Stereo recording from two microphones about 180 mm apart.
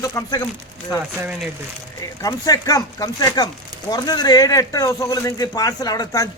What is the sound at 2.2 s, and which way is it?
Speech, 20° left (ahead or behind).